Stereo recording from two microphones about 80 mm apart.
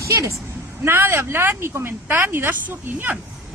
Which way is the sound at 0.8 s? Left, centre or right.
Right.